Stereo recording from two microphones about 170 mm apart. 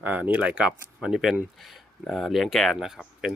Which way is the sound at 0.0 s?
10° right (ahead or behind).